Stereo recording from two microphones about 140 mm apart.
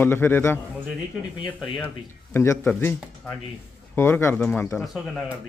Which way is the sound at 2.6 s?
10° left (ahead or behind).